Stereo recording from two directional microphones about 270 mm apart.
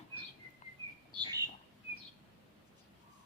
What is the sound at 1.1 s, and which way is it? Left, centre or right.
Bird, centre.